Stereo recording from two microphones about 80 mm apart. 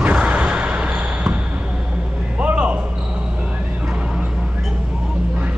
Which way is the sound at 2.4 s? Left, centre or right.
Centre.